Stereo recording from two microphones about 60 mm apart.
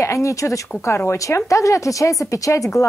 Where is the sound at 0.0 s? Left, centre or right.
Left.